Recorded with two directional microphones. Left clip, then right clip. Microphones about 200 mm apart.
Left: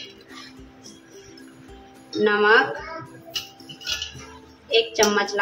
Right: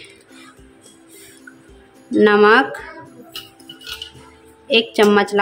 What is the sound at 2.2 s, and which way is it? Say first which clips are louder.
Speech: right 6 dB; 55° right (ahead or behind).